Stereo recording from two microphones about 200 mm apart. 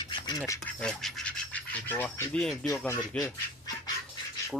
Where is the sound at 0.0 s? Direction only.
20° left (ahead or behind).